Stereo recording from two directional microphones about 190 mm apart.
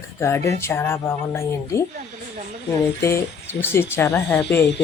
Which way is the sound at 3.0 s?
15° left (ahead or behind).